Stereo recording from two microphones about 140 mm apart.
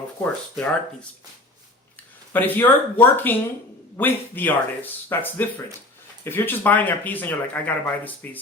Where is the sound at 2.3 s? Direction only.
15° left (ahead or behind).